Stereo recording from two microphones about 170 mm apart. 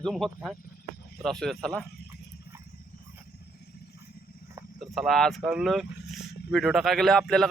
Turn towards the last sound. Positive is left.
turn(degrees=0)  # may be behind; listen again after turning